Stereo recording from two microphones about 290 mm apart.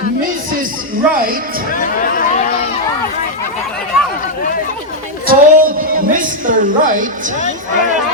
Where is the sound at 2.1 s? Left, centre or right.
Left.